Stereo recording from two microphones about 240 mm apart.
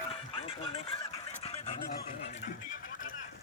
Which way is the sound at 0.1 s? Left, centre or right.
Left.